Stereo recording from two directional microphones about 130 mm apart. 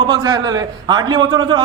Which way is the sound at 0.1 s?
35° right (ahead or behind).